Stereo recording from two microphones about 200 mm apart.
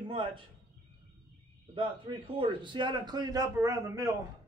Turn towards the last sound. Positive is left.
turn(degrees=-15)  # may be behind; listen again after turning